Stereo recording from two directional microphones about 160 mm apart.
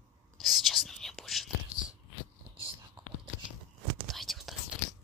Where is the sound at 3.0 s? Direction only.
30° right (ahead or behind).